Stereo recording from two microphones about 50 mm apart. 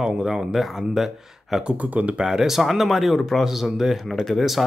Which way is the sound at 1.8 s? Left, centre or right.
Right.